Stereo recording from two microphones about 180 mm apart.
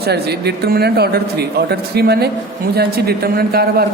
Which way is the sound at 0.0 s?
65° right (ahead or behind).